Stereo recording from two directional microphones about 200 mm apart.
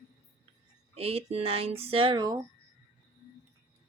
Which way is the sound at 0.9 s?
30° right (ahead or behind).